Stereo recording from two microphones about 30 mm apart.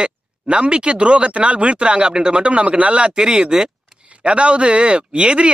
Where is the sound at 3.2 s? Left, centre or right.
Right.